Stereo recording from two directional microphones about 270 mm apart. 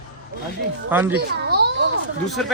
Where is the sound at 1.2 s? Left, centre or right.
Right.